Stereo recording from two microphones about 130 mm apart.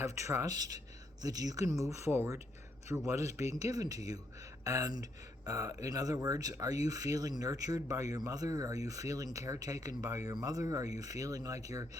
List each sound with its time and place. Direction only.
0.0 s speech: 25° right (ahead or behind)